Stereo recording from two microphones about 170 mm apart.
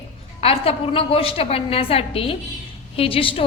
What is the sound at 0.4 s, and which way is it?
A woman's voice, 35° left (ahead or behind).